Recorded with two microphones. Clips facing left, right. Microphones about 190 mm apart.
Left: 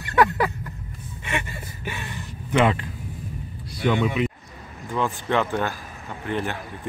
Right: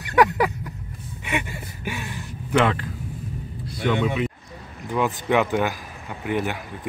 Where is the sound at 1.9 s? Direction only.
10° right (ahead or behind).